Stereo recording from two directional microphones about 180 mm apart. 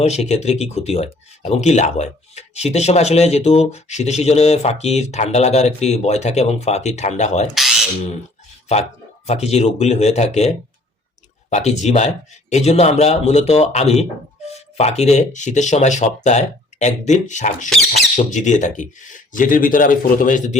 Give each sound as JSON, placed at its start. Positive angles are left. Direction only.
{"t": 0.0, "sound": "speech", "side_deg": 35}
{"t": 7.5, "sound": "a sound", "side_deg": 0}
{"t": 8.7, "sound": "speech", "side_deg": 35}
{"t": 17.7, "sound": "speech", "side_deg": 0}
{"t": 18.2, "sound": "speech", "side_deg": 40}